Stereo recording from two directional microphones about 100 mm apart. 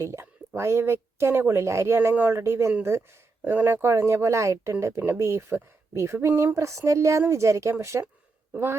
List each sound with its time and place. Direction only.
0.0 s speech: 30° right (ahead or behind)